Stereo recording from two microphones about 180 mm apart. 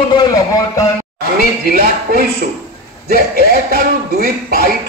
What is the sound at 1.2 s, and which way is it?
A man's voice, 50° right (ahead or behind).